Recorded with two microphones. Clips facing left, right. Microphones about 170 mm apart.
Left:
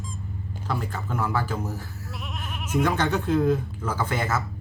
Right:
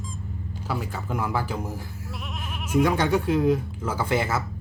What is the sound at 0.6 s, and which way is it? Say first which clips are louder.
Speech: even; 10° right (ahead or behind).